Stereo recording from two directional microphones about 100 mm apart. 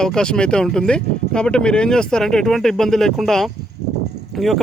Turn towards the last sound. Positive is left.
turn(degrees=0)  # may be behind; listen again after turning